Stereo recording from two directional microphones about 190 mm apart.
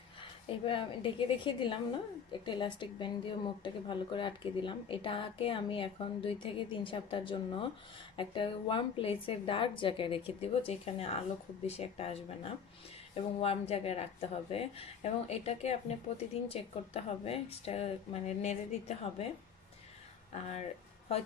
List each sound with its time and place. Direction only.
0.2 s a woman's voice: 25° left (ahead or behind)